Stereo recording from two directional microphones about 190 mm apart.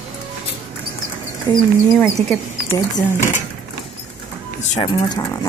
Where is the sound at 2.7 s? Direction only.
15° left (ahead or behind).